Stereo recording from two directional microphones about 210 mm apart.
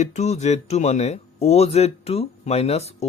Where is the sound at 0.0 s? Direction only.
35° left (ahead or behind).